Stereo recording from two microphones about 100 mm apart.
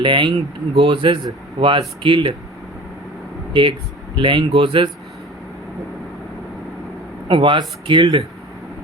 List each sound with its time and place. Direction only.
0.0 s speech: 55° right (ahead or behind)
3.5 s speech: 55° right (ahead or behind)
7.3 s speech: 55° right (ahead or behind)